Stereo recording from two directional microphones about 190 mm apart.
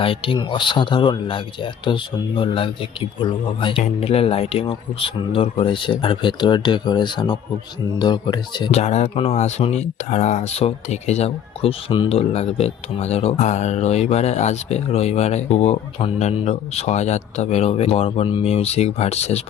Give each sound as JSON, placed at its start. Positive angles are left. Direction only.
{"t": 0.0, "sound": "speech", "side_deg": 30}
{"t": 8.7, "sound": "speech", "side_deg": 35}